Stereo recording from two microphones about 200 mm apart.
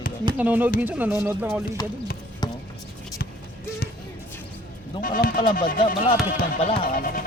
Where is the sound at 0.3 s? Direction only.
10° right (ahead or behind).